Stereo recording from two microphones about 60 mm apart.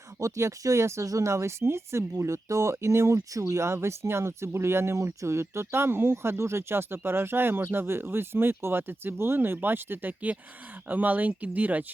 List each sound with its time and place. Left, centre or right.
0.2 s speech: right